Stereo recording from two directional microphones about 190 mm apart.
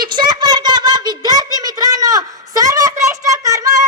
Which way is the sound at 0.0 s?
25° right (ahead or behind).